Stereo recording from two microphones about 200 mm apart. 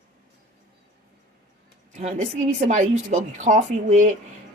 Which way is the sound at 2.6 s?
35° right (ahead or behind).